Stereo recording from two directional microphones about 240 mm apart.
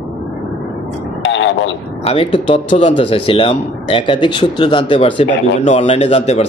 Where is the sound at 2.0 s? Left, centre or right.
Left.